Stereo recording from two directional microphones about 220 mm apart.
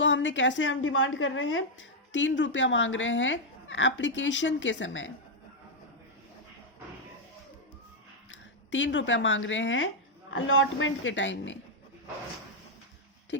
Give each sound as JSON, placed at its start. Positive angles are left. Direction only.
{"t": 0.0, "sound": "a woman's voice", "side_deg": 55}
{"t": 8.3, "sound": "a woman's voice", "side_deg": 55}
{"t": 13.3, "sound": "a sound", "side_deg": 55}